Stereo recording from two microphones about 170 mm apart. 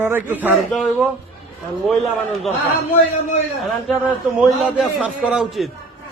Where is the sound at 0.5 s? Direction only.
Centre (ahead or behind).